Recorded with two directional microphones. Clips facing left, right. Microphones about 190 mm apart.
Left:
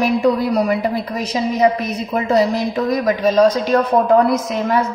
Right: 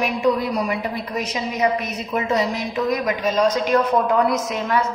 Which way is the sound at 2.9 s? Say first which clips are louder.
Left 5 dB; 35° left (ahead or behind).